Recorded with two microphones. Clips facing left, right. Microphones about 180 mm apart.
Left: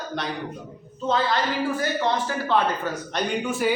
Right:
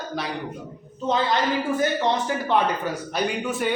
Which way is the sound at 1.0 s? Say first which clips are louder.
Right 1 dB; 20° right (ahead or behind).